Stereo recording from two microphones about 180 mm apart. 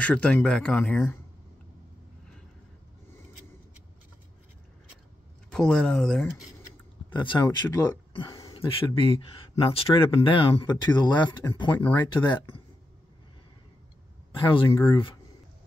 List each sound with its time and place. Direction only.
0.0 s speech: 5° left (ahead or behind)
5.5 s speech: 5° left (ahead or behind)
7.1 s speech: 25° left (ahead or behind)
8.3 s a sound: 20° left (ahead or behind)
8.5 s speech: 30° left (ahead or behind)
14.4 s speech: 30° left (ahead or behind)